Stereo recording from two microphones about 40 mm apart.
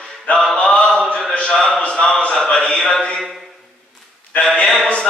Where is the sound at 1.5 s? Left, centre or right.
Centre.